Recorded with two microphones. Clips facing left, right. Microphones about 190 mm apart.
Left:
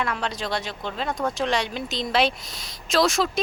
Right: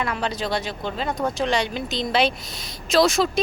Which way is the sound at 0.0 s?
Centre (ahead or behind).